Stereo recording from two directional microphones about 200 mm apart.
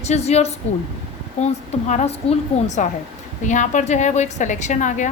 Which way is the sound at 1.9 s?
35° left (ahead or behind).